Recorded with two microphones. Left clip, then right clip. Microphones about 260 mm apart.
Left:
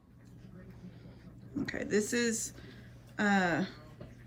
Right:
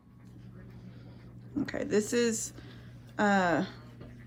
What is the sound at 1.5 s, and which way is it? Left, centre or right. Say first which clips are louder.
A woman's voice: right 3 dB; centre.